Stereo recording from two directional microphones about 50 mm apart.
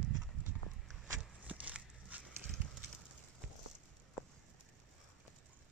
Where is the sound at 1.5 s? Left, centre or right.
Right.